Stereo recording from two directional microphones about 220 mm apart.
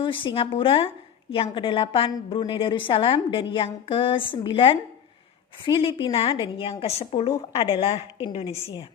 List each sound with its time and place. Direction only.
0.0 s a woman's voice: 20° left (ahead or behind)